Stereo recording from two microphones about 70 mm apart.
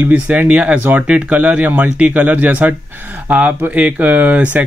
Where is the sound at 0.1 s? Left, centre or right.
Right.